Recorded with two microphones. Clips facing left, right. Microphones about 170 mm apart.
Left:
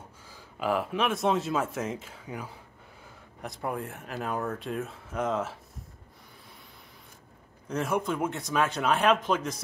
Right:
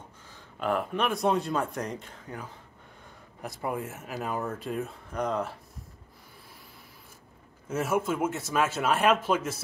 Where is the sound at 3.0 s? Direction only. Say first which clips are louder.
Right 1 dB; centre (ahead or behind).